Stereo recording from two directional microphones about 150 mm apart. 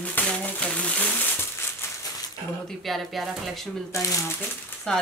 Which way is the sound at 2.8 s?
Centre (ahead or behind).